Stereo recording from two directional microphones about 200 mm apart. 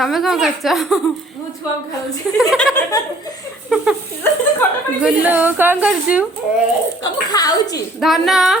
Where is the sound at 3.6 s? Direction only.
Centre (ahead or behind).